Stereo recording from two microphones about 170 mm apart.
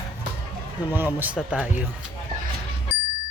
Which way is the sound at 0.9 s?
10° right (ahead or behind).